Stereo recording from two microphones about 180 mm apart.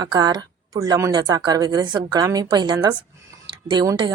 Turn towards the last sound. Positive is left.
turn(degrees=-20)  # may be behind; listen again after turning